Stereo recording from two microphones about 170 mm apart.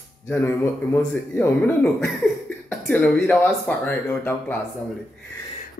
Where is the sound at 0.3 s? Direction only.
15° left (ahead or behind).